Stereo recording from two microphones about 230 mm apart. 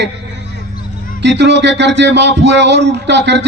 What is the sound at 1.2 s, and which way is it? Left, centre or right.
Speech, right.